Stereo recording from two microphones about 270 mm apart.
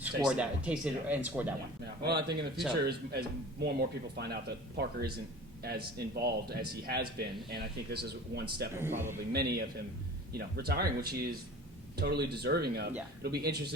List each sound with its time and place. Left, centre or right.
0.0 s speech: centre
1.8 s a man's voice: right
8.7 s speech: centre
9.3 s a man's voice: right